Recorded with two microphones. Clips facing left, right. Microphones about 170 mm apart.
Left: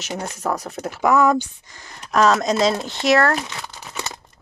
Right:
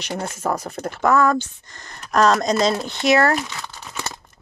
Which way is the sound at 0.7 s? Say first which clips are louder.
Left 1 dB; 10° left (ahead or behind).